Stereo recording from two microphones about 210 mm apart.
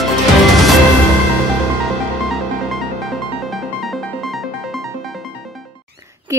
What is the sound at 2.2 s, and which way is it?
Music, centre (ahead or behind).